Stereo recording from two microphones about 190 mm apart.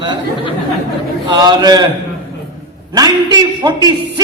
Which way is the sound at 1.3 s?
20° right (ahead or behind).